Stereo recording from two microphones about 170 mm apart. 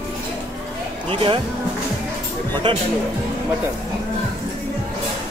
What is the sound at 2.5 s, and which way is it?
Speech, 25° right (ahead or behind).